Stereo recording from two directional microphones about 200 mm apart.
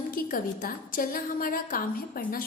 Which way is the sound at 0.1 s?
45° left (ahead or behind).